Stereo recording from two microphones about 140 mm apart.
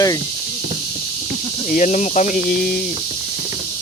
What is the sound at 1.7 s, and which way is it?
Speech, 65° left (ahead or behind).